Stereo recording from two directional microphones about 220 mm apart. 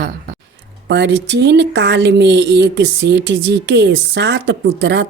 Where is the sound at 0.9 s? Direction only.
50° right (ahead or behind).